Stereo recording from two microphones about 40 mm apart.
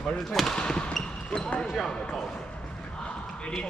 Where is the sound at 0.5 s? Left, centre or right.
Left.